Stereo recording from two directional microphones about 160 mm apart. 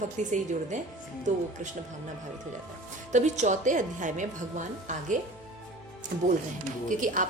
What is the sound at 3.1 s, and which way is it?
A woman's voice, 45° right (ahead or behind).